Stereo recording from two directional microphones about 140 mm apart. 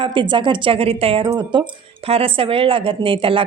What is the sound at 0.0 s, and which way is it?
A woman's voice, 35° right (ahead or behind).